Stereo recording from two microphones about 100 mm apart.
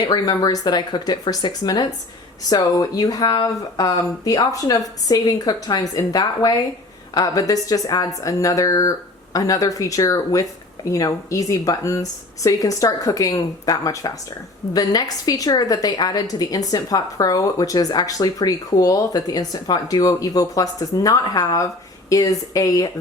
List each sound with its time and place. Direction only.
0.0 s a woman's voice: 45° left (ahead or behind)